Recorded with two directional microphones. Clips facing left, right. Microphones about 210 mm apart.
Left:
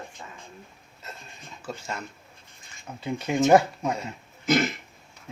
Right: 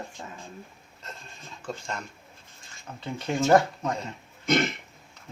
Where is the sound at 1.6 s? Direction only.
5° left (ahead or behind).